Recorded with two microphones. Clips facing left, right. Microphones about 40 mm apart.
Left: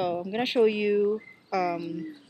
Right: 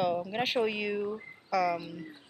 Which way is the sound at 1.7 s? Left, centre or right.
Centre.